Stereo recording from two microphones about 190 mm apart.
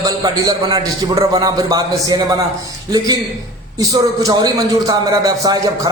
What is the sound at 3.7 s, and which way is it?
A man's voice, 20° right (ahead or behind).